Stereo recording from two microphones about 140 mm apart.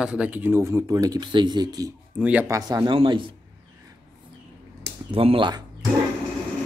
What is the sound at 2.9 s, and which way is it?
Speech, 35° right (ahead or behind).